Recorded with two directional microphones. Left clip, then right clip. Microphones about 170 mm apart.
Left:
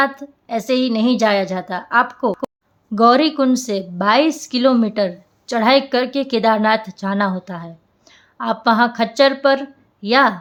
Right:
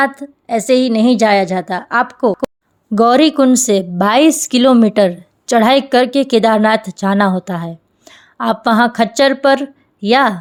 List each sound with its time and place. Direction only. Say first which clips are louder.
0.0 s a woman's voice: right 3 dB; 35° right (ahead or behind)